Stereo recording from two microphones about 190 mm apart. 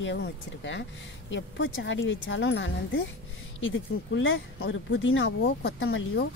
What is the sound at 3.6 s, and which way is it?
Speech, 90° left.